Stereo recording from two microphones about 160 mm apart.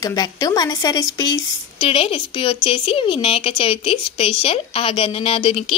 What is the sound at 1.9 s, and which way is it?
Speech, 35° left (ahead or behind).